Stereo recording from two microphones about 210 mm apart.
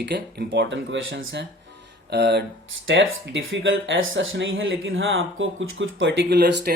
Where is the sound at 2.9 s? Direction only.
65° right (ahead or behind).